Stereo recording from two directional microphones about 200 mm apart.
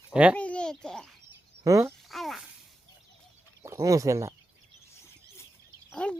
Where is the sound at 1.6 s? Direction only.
15° right (ahead or behind).